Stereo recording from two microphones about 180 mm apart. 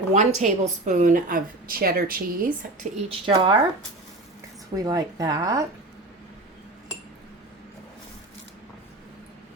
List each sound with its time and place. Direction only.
0.1 s a woman's voice: 40° right (ahead or behind)
3.1 s speech: 30° right (ahead or behind)
4.7 s speech: 20° right (ahead or behind)